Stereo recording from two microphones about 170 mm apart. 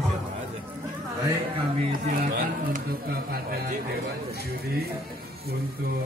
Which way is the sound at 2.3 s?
70° right (ahead or behind).